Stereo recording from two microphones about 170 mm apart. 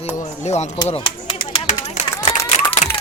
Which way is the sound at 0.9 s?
30° left (ahead or behind).